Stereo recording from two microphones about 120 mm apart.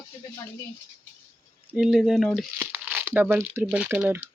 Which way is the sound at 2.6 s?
15° right (ahead or behind).